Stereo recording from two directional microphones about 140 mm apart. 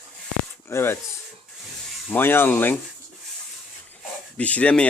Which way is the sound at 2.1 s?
15° left (ahead or behind).